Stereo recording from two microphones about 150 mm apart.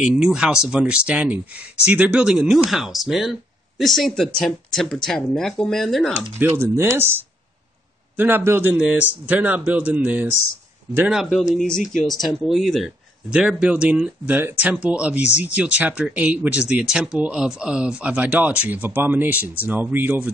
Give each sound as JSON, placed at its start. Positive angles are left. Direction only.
{"t": 0.0, "sound": "speech", "side_deg": -5}
{"t": 6.4, "sound": "speech", "side_deg": -15}